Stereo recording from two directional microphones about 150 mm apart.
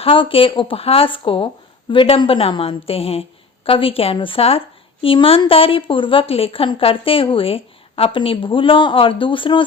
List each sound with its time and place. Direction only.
0.0 s a woman's voice: 35° left (ahead or behind)